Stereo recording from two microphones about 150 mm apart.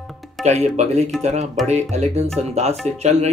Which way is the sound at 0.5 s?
50° right (ahead or behind).